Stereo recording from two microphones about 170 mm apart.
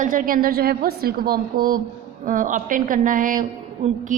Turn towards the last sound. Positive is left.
turn(degrees=-50)  # may be behind; listen again after turning